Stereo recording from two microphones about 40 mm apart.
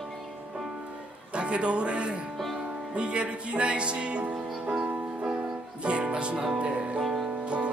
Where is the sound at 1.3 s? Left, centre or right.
Right.